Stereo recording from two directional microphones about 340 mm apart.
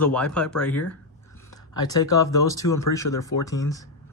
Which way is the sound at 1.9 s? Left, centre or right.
Centre.